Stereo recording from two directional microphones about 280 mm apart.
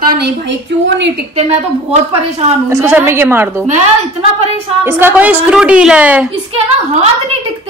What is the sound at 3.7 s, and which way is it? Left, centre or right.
Speech, right.